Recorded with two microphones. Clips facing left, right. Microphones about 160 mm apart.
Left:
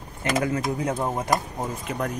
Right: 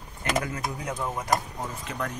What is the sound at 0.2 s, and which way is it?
Speech, 25° left (ahead or behind).